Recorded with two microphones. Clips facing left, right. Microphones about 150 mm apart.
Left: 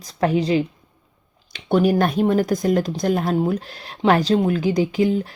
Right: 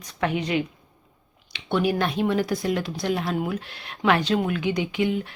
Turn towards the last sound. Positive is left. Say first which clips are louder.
# left 6 dB
turn(degrees=35)  # may be behind; listen again after turning